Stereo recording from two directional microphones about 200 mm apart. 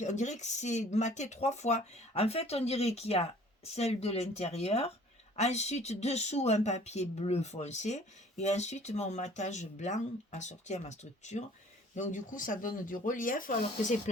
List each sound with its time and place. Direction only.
0.0 s speech: 35° left (ahead or behind)